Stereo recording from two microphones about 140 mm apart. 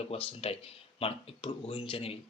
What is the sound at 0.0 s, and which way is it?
Speech, 45° left (ahead or behind).